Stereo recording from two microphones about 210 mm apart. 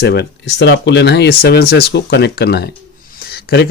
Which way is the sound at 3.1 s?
45° left (ahead or behind).